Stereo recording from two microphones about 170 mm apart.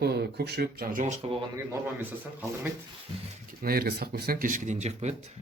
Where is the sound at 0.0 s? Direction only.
70° right (ahead or behind); by 1.4 s 45° right (ahead or behind).